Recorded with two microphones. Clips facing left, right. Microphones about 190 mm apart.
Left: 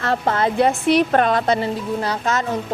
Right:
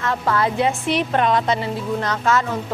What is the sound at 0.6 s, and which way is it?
A woman's voice, 40° left (ahead or behind).